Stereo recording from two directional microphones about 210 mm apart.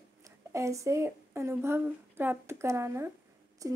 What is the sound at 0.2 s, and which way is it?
A woman's voice, 15° right (ahead or behind).